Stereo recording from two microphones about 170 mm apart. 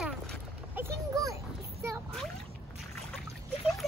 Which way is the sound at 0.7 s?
15° right (ahead or behind).